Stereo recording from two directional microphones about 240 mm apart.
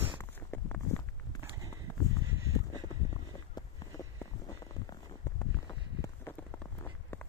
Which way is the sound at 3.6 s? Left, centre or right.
Centre.